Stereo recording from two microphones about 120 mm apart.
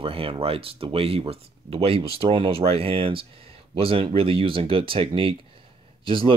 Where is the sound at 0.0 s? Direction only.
50° right (ahead or behind).